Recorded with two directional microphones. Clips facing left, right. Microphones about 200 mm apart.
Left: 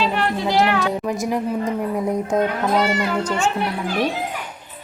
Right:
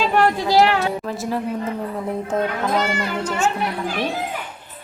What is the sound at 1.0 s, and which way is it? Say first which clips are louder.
A woman's voice: left 2 dB; 15° left (ahead or behind).